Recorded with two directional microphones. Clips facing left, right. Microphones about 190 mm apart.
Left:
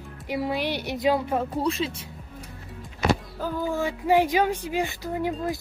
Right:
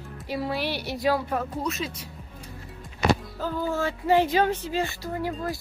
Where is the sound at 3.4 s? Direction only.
15° left (ahead or behind).